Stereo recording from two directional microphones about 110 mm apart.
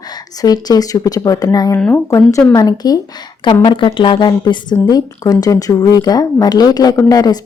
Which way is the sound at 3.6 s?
50° left (ahead or behind).